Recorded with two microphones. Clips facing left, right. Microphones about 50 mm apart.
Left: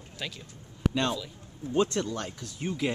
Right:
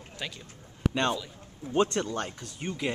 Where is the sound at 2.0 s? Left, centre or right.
Right.